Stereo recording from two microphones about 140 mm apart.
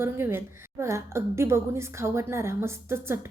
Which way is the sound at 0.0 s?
15° right (ahead or behind).